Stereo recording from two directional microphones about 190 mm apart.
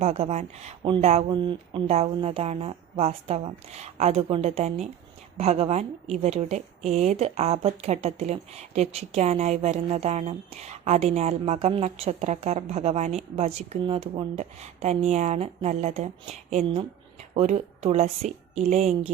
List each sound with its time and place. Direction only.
0.0 s a woman's voice: 35° right (ahead or behind)